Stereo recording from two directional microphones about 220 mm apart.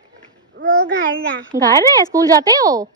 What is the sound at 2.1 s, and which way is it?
Speech, 15° right (ahead or behind).